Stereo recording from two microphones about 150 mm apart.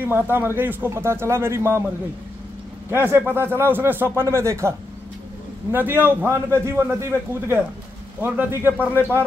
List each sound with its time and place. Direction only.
0.0 s a man's voice: 15° right (ahead or behind)
2.9 s a man's voice: 15° right (ahead or behind)